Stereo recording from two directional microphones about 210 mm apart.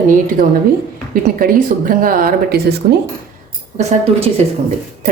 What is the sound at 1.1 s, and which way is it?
Speech, 40° right (ahead or behind).